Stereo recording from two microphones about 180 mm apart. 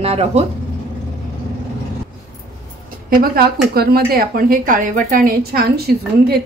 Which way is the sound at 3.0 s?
55° right (ahead or behind).